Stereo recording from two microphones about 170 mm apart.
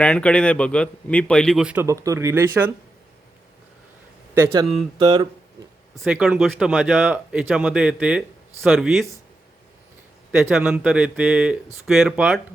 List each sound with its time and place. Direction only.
0.0 s a man's voice: 5° left (ahead or behind); by 2.7 s 10° right (ahead or behind)
4.9 s speech: 30° right (ahead or behind)
5.9 s a man's voice: centre (ahead or behind)
10.5 s a man's voice: 5° right (ahead or behind)